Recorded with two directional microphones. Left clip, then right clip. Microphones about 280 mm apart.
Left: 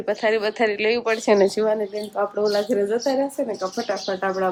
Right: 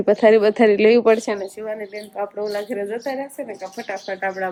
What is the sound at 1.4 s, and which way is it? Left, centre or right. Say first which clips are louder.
Speech: left 9 dB; left.